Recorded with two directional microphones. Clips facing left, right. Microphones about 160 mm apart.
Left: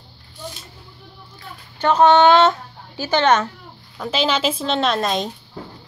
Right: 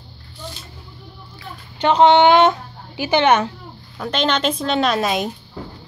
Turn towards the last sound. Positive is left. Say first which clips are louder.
# right 1 dB
turn(degrees=-5)  # may be behind; listen again after turning